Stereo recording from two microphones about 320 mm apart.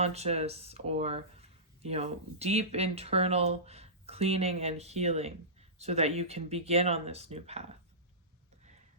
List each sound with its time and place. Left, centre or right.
0.0 s speech: centre